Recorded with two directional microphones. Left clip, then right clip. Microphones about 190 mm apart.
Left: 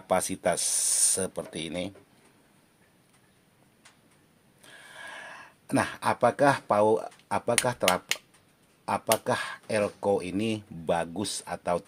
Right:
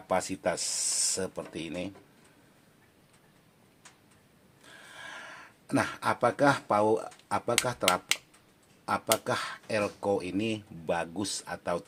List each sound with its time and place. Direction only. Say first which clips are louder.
0.1 s speech: left 3 dB; 40° left (ahead or behind)
4.6 s a sound: left 2 dB; 35° left (ahead or behind)
7.6 s speech: left 2 dB; 35° left (ahead or behind)